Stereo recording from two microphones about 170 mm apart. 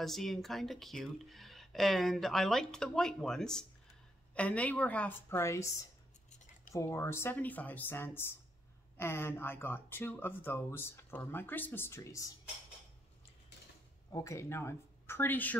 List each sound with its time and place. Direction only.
0.0 s speech: centre (ahead or behind)
6.7 s speech: 15° left (ahead or behind)
14.1 s speech: 15° left (ahead or behind)